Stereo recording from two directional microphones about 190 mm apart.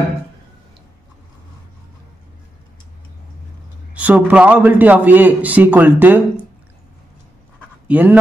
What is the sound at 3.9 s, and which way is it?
Speech, 10° right (ahead or behind).